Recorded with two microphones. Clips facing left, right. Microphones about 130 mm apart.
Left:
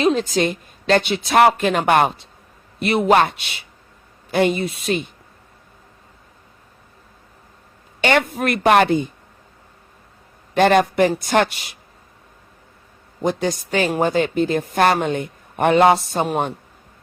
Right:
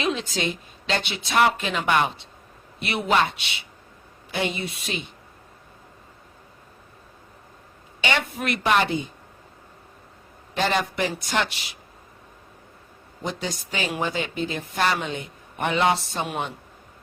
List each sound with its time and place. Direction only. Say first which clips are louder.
0.0 s speech: left 8 dB; 45° left (ahead or behind)
8.0 s speech: left 7 dB; 50° left (ahead or behind)
10.5 s speech: left 10 dB; 55° left (ahead or behind)
13.2 s speech: left 9 dB; 50° left (ahead or behind)